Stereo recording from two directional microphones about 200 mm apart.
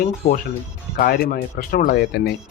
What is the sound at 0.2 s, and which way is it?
Speech, 45° left (ahead or behind).